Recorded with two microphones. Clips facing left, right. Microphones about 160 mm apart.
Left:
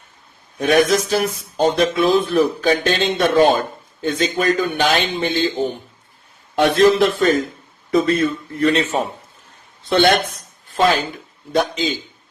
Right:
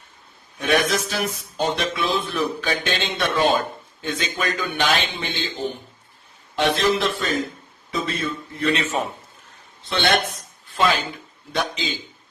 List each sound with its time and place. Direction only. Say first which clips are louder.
0.6 s speech: left 6 dB; 40° left (ahead or behind)